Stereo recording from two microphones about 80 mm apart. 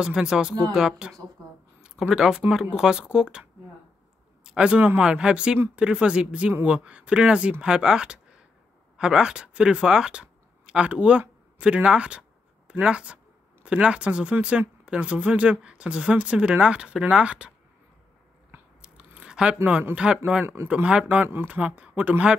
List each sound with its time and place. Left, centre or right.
0.0 s speech: centre
4.5 s speech: centre
18.8 s biting: centre
20.0 s speech: centre